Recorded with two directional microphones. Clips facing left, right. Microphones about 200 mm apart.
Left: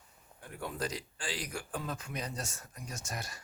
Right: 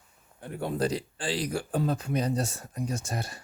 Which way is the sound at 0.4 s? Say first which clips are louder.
Right 9 dB; 30° right (ahead or behind).